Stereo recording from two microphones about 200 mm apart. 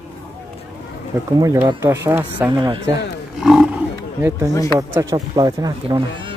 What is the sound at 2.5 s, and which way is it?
Speech, 20° right (ahead or behind).